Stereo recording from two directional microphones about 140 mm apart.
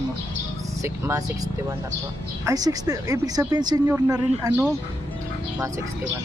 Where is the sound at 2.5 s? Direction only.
25° right (ahead or behind).